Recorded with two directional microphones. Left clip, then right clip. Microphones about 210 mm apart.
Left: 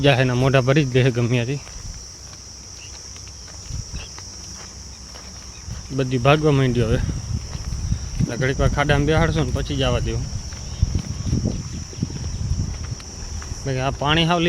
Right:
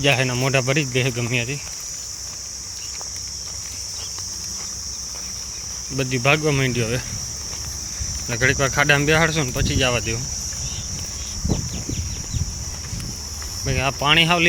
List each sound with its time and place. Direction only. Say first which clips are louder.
0.0 s speech: left 1 dB; 30° left (ahead or behind)
6.0 s speech: left 1 dB; 25° left (ahead or behind)
8.3 s cricket: right 4 dB; 10° left (ahead or behind)
13.7 s speech: right 2 dB; 20° left (ahead or behind)